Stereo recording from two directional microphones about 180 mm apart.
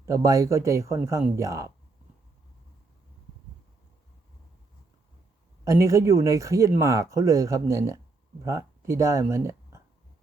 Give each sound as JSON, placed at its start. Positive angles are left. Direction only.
{"t": 0.0, "sound": "speech", "side_deg": -15}
{"t": 5.6, "sound": "speech", "side_deg": -15}